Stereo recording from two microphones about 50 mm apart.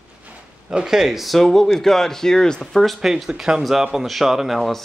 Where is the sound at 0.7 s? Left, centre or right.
Centre.